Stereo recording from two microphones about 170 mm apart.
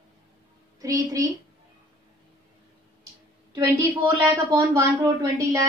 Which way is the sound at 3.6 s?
20° right (ahead or behind).